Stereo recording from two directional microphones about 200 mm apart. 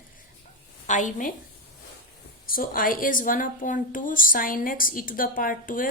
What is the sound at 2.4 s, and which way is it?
A woman's voice, 45° left (ahead or behind).